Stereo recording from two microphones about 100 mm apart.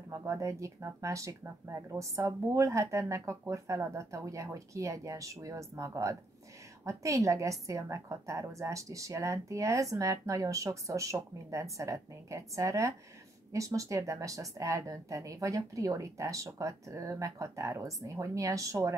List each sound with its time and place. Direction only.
0.1 s a woman's voice: 30° right (ahead or behind)